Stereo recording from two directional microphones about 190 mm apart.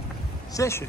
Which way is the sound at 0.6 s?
15° left (ahead or behind).